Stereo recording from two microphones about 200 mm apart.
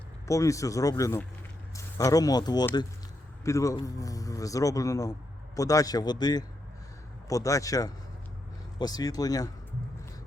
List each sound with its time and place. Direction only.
0.3 s a man's voice: 15° left (ahead or behind)